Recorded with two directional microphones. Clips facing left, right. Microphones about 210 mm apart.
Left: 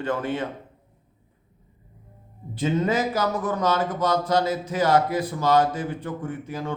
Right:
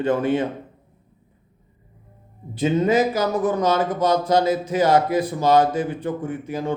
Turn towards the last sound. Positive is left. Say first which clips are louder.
# right 5 dB
turn(degrees=-15)  # may be behind; listen again after turning